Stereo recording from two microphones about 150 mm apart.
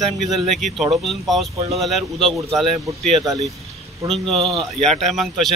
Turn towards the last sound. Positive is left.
turn(degrees=0)  # may be behind; listen again after turning